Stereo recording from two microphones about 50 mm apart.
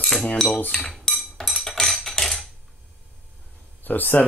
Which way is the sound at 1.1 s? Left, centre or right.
Centre.